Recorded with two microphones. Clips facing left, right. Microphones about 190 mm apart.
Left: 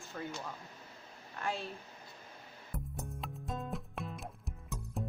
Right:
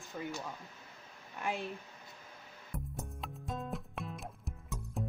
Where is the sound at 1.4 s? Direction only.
15° right (ahead or behind).